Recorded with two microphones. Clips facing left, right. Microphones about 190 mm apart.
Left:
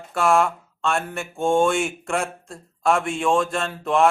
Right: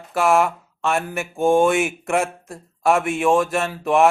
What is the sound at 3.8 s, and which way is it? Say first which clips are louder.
Speech: right 2 dB; 15° right (ahead or behind).